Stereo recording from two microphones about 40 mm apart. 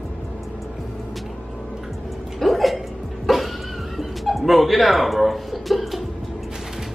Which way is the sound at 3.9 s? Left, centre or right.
Centre.